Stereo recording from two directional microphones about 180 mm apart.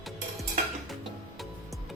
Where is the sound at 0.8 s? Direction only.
Centre (ahead or behind).